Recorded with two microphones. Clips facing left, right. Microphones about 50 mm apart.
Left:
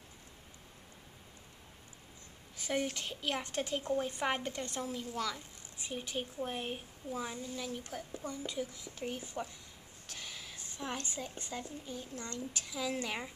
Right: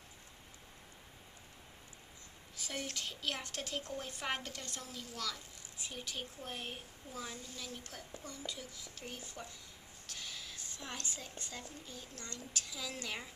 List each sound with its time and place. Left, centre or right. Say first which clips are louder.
2.6 s a woman's voice: left 7 dB; left
10.1 s a sound: left 1 dB; centre
11.3 s a woman's voice: left 5 dB; left